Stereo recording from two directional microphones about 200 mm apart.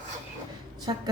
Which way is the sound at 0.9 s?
20° right (ahead or behind).